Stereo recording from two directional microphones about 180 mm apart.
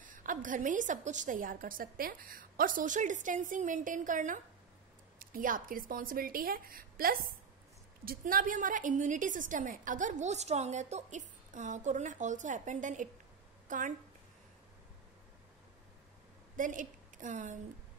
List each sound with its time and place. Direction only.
0.0 s a woman's voice: 45° right (ahead or behind)
16.5 s a woman's voice: 45° right (ahead or behind)